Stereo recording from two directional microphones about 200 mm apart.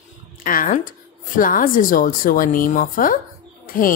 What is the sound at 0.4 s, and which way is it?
A woman's voice, 40° left (ahead or behind).